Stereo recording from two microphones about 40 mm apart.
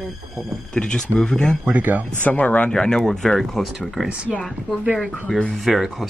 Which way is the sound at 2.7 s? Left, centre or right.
Centre.